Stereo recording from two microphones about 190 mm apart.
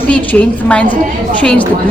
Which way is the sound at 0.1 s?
10° left (ahead or behind).